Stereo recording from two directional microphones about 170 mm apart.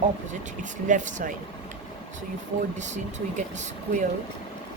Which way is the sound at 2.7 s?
45° right (ahead or behind).